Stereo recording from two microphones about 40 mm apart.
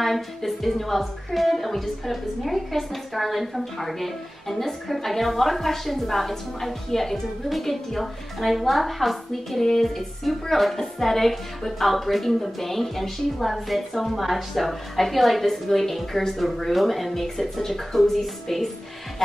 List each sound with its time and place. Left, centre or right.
0.0 s a woman's voice: centre